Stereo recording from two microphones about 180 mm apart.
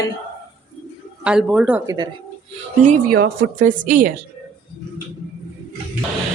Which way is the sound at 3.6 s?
45° right (ahead or behind).